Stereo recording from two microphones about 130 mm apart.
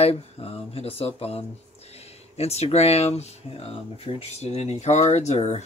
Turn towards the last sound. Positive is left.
turn(degrees=60)  # may be behind; listen again after turning